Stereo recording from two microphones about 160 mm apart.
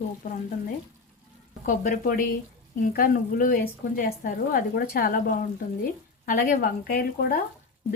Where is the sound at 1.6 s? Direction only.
60° left (ahead or behind).